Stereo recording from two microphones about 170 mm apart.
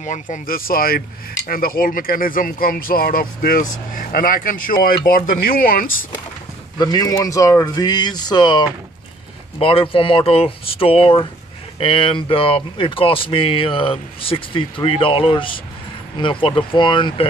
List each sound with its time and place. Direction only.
0.0 s speech: 45° left (ahead or behind)
6.8 s speech: 25° left (ahead or behind)